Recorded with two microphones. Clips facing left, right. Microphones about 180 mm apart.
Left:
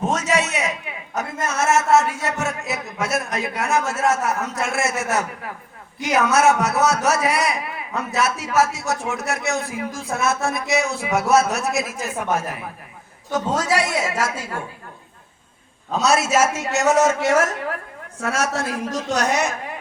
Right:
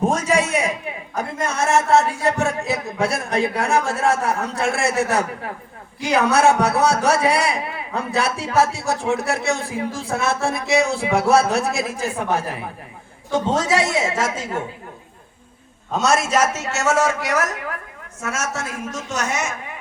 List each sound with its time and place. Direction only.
1.1 s a man's voice: 30° right (ahead or behind)
15.9 s a man's voice: centre (ahead or behind); by 19.5 s 35° left (ahead or behind)